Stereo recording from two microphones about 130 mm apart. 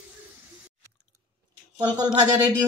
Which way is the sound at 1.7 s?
30° right (ahead or behind).